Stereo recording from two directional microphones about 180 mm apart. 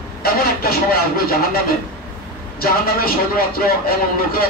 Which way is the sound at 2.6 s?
55° left (ahead or behind).